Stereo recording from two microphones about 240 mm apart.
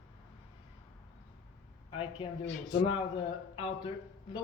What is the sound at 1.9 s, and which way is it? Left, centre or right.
A man's voice, left.